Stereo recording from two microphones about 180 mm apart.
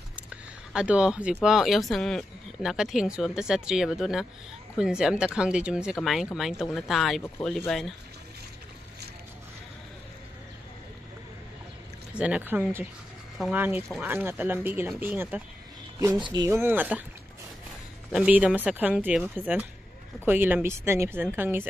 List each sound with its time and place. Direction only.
0.1 s a sound: 5° right (ahead or behind)
1.4 s speech: centre (ahead or behind)
12.1 s speech: 5° right (ahead or behind)
16.0 s speech: 20° right (ahead or behind)
16.4 s speech: 15° right (ahead or behind)
18.1 s speech: 5° right (ahead or behind)